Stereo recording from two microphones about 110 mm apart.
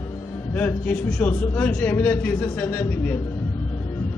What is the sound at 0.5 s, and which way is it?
A man's voice, 15° left (ahead or behind).